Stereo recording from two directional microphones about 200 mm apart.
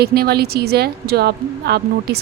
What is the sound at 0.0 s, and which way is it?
A woman's voice, 50° right (ahead or behind).